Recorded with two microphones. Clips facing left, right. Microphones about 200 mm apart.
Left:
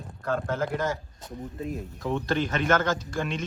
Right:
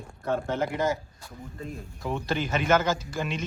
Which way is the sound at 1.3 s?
5° left (ahead or behind).